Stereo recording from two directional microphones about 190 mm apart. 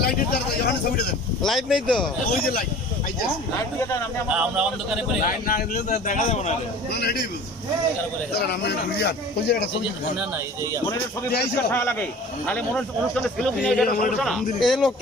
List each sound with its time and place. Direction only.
0.0 s a man's voice: 55° left (ahead or behind)
1.4 s a man's voice: centre (ahead or behind)
2.3 s a man's voice: 50° left (ahead or behind)
4.3 s a man's voice: 5° right (ahead or behind)
5.2 s a man's voice: 45° left (ahead or behind)
6.9 s speech: 55° left (ahead or behind)
8.4 s speech: 60° left (ahead or behind)
11.7 s a man's voice: 10° left (ahead or behind)
13.8 s a man's voice: 45° left (ahead or behind)
14.2 s a man's voice: centre (ahead or behind)